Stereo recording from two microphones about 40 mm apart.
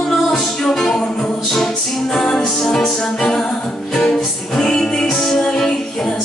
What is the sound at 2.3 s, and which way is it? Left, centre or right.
Music, left.